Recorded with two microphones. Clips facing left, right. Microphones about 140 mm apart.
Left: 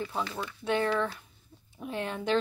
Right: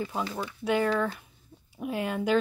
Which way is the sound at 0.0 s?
10° right (ahead or behind).